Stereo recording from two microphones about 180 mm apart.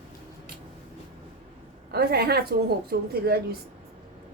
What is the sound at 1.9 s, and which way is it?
A woman's voice, 60° right (ahead or behind).